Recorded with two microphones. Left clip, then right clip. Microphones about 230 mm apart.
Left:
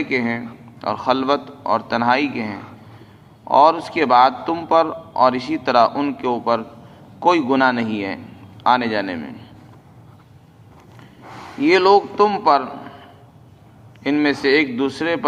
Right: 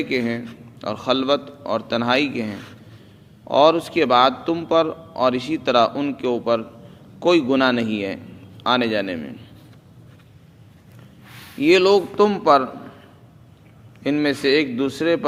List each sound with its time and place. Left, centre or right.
0.0 s a man's voice: right
11.6 s a man's voice: right
14.0 s a man's voice: right